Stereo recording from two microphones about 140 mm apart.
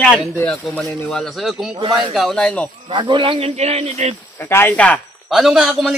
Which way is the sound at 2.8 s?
35° right (ahead or behind).